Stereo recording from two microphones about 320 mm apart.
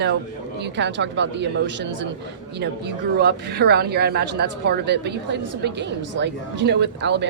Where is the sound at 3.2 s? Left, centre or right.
Right.